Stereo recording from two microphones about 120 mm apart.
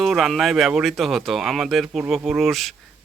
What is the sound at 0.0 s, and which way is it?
Speech, centre (ahead or behind).